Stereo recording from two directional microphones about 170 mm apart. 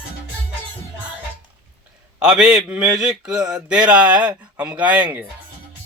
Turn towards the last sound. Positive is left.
turn(degrees=-10)  # may be behind; listen again after turning